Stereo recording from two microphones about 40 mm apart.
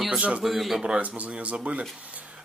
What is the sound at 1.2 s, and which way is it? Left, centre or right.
Speech, right.